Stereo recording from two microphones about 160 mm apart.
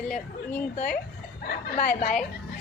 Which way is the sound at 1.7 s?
55° left (ahead or behind).